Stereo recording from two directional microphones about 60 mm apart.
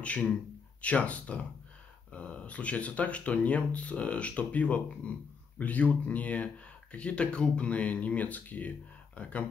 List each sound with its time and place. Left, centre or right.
0.0 s speech: left